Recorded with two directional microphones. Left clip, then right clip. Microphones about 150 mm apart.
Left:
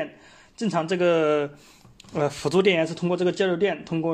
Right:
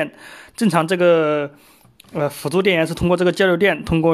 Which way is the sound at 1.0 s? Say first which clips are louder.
Right 4 dB; 30° right (ahead or behind).